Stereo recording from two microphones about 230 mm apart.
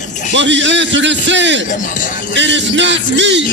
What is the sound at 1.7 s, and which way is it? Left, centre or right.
Speech, left.